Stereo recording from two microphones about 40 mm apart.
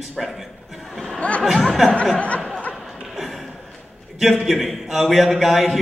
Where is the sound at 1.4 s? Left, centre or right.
Centre.